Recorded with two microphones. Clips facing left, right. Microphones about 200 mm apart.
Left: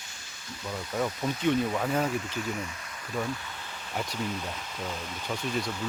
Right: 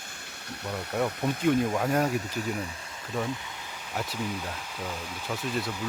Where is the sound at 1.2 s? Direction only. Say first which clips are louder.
Right 2 dB; 15° right (ahead or behind).